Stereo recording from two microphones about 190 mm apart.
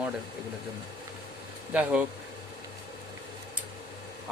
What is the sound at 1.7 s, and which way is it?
Speech, 10° right (ahead or behind).